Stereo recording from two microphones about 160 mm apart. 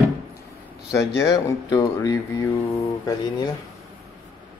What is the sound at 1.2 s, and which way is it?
Speech, 20° left (ahead or behind).